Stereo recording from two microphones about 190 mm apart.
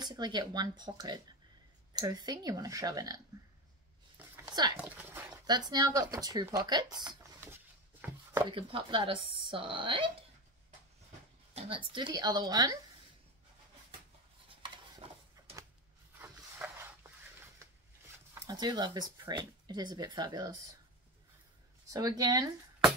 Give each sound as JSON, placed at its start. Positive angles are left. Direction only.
{"t": 0.0, "sound": "speech", "side_deg": -20}
{"t": 4.5, "sound": "a sound", "side_deg": -20}
{"t": 4.7, "sound": "speech", "side_deg": -10}
{"t": 5.5, "sound": "speech", "side_deg": -20}
{"t": 7.0, "sound": "a sound", "side_deg": -20}
{"t": 7.4, "sound": "chopping", "side_deg": -10}
{"t": 8.5, "sound": "speech", "side_deg": -30}
{"t": 11.5, "sound": "speech", "side_deg": -25}
{"t": 14.6, "sound": "a sound", "side_deg": -25}
{"t": 16.2, "sound": "a sound", "side_deg": -10}
{"t": 18.5, "sound": "speech", "side_deg": -20}
{"t": 21.9, "sound": "speech", "side_deg": -20}